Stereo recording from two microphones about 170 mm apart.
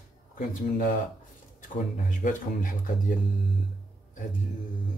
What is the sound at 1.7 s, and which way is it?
Speech, 50° left (ahead or behind).